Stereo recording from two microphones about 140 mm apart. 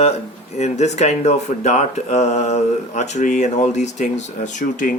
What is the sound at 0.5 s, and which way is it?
Speech, 55° left (ahead or behind).